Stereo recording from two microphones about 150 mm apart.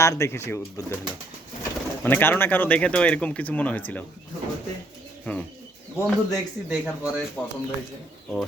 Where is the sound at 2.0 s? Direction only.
15° left (ahead or behind).